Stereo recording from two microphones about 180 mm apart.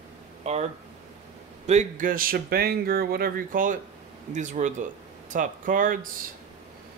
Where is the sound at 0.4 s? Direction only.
35° right (ahead or behind).